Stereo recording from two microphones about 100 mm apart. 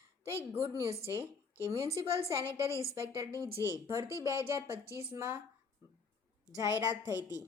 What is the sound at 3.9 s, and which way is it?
Speech, 30° right (ahead or behind).